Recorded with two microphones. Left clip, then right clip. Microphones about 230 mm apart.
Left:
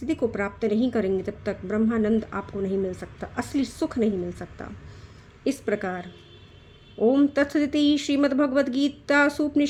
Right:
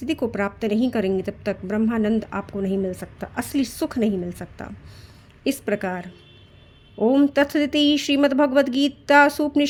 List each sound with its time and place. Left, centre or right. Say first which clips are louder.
0.0 s a woman's voice: right 2 dB; right